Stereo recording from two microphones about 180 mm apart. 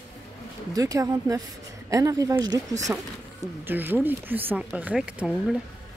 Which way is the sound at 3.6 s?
10° right (ahead or behind).